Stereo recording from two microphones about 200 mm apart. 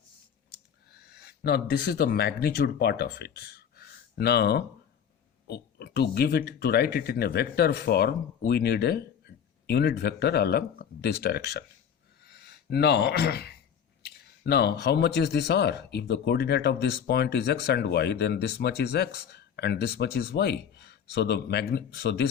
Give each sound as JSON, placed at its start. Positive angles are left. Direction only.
{"t": 1.1, "sound": "speech", "side_deg": 50}
{"t": 12.2, "sound": "gasp", "side_deg": 55}
{"t": 14.0, "sound": "speech", "side_deg": 55}